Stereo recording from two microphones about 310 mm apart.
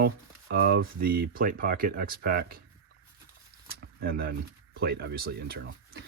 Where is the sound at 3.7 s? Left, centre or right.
Right.